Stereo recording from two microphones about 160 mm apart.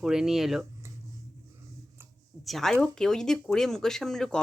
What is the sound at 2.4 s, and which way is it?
Speech, centre (ahead or behind).